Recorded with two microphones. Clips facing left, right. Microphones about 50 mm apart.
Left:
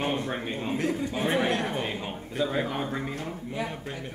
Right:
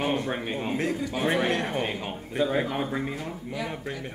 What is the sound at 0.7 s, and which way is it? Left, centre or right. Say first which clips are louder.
Speech: left 1 dB; right.